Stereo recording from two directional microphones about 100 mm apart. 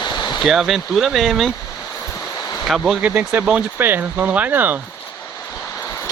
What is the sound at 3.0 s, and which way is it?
Speech, 15° right (ahead or behind).